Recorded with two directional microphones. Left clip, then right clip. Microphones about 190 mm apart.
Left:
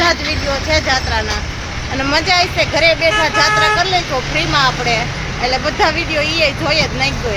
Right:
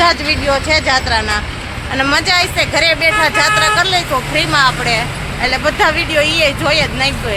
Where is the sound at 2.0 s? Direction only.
5° right (ahead or behind).